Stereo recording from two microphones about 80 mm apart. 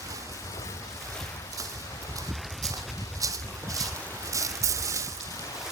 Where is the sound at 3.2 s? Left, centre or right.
Right.